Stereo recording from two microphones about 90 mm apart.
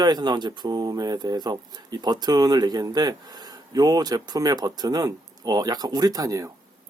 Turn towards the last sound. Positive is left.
turn(degrees=-40)  # may be behind; listen again after turning